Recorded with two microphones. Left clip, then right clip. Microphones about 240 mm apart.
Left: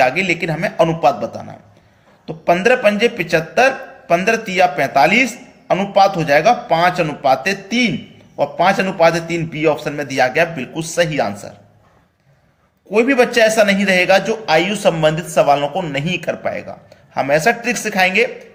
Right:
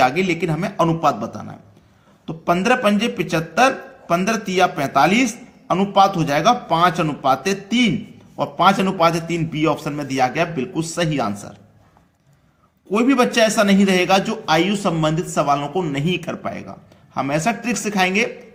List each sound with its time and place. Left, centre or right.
0.0 s a man's voice: right
12.9 s a man's voice: centre